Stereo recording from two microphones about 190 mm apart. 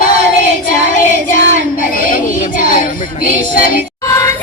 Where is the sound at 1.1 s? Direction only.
50° left (ahead or behind).